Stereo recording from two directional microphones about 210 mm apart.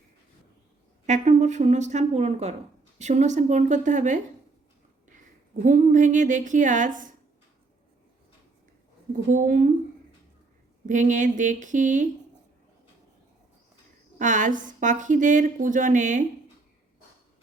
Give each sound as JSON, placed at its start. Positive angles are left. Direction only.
{"t": 1.0, "sound": "a woman's voice", "side_deg": -35}
{"t": 5.6, "sound": "a woman's voice", "side_deg": -35}
{"t": 9.3, "sound": "a woman's voice", "side_deg": -40}
{"t": 10.8, "sound": "a woman's voice", "side_deg": -35}
{"t": 14.2, "sound": "a woman's voice", "side_deg": -35}